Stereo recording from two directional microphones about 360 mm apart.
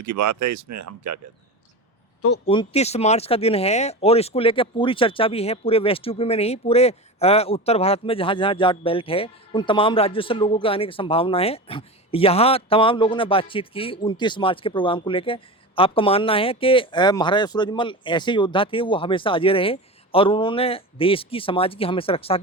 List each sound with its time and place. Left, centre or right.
0.0 s speech: right
2.5 s speech: centre